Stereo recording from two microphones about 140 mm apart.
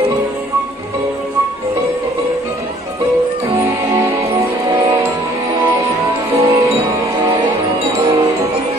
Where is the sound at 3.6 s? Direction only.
20° right (ahead or behind).